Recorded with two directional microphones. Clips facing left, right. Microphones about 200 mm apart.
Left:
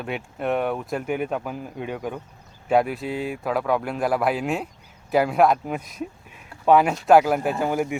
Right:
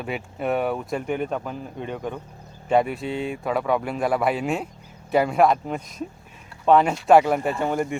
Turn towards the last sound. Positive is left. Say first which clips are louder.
# left 1 dB
turn(degrees=5)  # may be behind; listen again after turning